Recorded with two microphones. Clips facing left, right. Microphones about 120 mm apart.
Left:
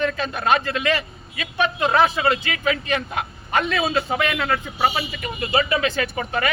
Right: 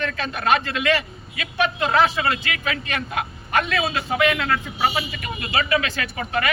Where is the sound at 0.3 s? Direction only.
25° left (ahead or behind).